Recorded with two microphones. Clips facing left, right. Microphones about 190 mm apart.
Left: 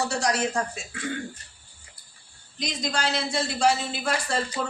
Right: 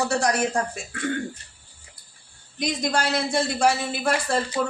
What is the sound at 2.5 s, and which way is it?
A man's voice, 55° right (ahead or behind).